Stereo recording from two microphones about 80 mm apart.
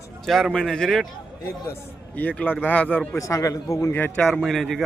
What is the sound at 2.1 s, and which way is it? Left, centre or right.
Speech, centre.